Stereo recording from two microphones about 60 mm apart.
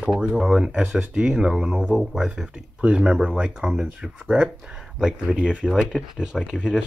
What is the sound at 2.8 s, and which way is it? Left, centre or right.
Speech, centre.